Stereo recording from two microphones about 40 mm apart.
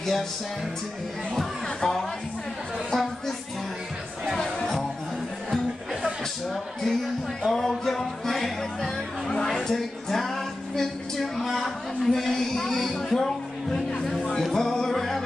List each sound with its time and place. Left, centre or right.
1.8 s speech: centre
2.9 s music: centre
4.4 s music: centre
6.5 s speech: centre